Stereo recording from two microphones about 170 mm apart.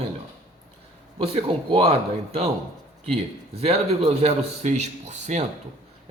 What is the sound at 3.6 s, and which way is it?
Speech, 35° right (ahead or behind).